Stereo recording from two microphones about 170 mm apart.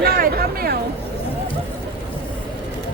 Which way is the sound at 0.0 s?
60° right (ahead or behind).